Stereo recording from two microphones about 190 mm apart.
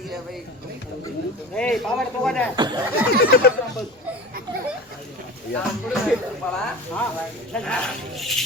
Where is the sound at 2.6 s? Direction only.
25° right (ahead or behind).